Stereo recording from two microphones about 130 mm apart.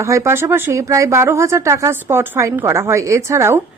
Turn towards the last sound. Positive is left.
turn(degrees=-20)  # may be behind; listen again after turning